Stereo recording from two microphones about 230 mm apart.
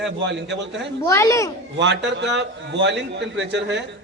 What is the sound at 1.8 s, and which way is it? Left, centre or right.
A man's voice, right.